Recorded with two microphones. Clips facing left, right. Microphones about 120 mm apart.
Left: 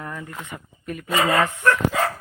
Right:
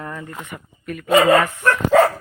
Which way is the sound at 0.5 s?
30° left (ahead or behind).